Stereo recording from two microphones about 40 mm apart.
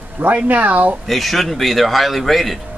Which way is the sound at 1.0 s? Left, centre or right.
Centre.